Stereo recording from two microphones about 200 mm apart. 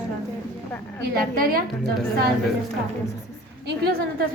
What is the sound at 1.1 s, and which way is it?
Speech, 45° right (ahead or behind).